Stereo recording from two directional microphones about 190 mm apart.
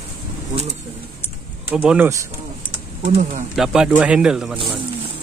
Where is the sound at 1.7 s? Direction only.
10° right (ahead or behind).